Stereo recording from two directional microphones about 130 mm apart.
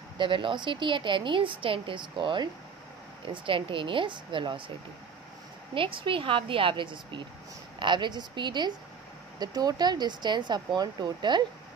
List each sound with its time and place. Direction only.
0.2 s speech: 40° right (ahead or behind)
5.8 s speech: 40° right (ahead or behind)